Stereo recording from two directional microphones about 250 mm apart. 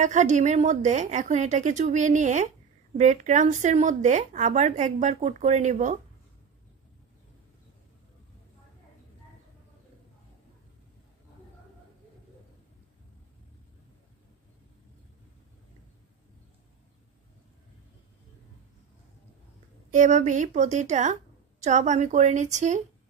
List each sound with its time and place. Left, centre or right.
0.0 s speech: right
19.9 s speech: right